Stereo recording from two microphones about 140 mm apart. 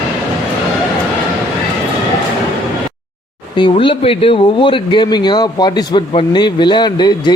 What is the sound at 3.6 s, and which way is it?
Speech, 40° left (ahead or behind).